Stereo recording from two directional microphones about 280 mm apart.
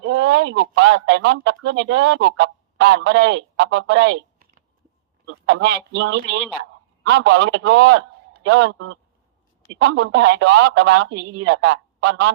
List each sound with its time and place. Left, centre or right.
0.0 s a man's voice: right